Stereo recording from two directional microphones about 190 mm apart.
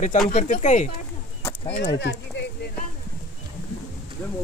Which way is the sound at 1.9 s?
65° left (ahead or behind).